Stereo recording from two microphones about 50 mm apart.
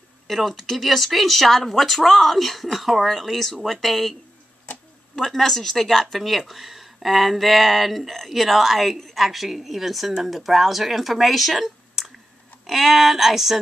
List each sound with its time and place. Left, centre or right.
0.3 s speech: centre